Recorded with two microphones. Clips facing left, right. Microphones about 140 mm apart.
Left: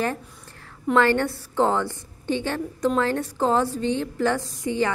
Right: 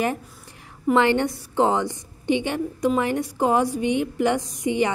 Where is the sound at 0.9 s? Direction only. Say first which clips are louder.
Even; 15° right (ahead or behind).